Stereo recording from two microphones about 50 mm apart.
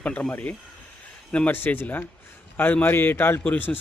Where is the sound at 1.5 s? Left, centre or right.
Left.